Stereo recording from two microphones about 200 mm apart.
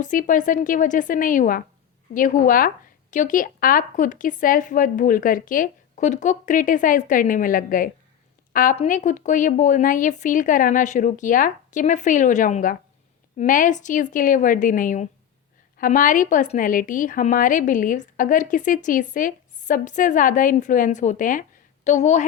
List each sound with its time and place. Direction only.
0.0 s speech: 40° left (ahead or behind)